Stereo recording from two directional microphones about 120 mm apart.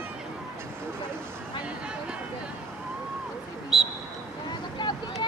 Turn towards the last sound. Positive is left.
turn(degrees=35)  # may be behind; listen again after turning